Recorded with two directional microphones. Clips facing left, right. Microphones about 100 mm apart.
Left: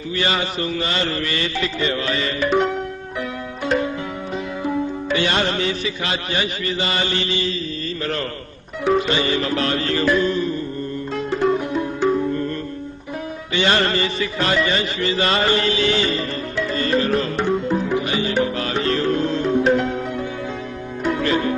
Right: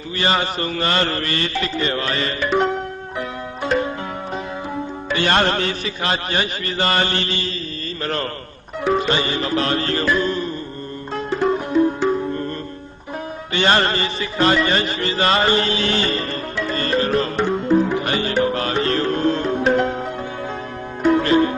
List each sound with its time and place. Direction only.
0.2 s mantra: 40° right (ahead or behind)
5.1 s mantra: 45° right (ahead or behind)
8.0 s music: 40° right (ahead or behind)
13.5 s music: 40° right (ahead or behind)
21.1 s music: 35° right (ahead or behind)